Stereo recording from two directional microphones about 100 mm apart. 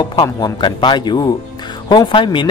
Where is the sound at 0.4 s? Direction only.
50° left (ahead or behind).